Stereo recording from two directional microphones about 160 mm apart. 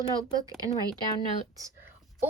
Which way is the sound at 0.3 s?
20° right (ahead or behind).